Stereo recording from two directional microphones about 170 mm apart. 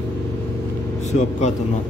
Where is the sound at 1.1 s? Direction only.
45° left (ahead or behind).